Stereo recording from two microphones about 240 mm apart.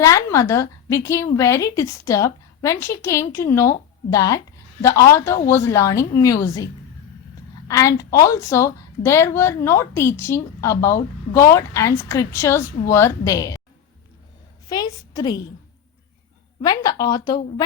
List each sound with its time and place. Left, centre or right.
0.0 s speech: centre
7.7 s speech: centre
14.7 s a woman's voice: centre
16.6 s speech: centre